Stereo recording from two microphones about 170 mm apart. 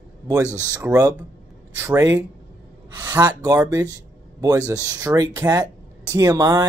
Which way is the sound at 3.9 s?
20° right (ahead or behind).